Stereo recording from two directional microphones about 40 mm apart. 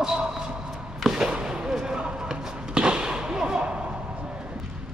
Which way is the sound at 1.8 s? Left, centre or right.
Right.